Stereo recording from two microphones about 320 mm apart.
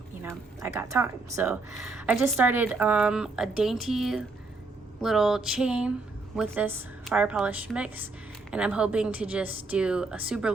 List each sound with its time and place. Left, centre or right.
0.2 s speech: centre